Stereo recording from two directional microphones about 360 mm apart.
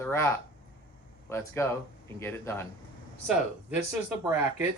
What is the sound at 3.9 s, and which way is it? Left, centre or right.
Speech, centre.